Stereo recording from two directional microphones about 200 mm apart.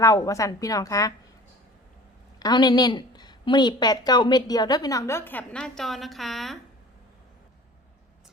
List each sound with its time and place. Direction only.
0.0 s a woman's voice: 15° left (ahead or behind)
2.4 s a woman's voice: 20° left (ahead or behind); by 6.6 s centre (ahead or behind)